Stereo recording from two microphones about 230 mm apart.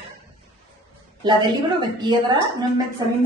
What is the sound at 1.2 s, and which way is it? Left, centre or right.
A woman's voice, centre.